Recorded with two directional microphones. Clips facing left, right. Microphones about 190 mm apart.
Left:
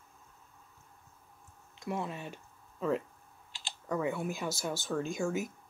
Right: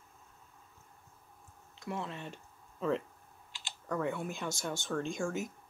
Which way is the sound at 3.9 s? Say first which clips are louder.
Left 2 dB; 5° left (ahead or behind).